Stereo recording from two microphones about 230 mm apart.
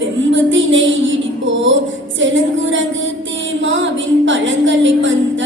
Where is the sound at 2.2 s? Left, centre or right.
Right.